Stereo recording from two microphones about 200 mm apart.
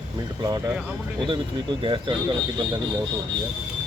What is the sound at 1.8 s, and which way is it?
Speech, 25° right (ahead or behind).